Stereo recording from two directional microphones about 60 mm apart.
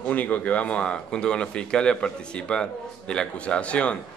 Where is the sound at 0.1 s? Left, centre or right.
Left.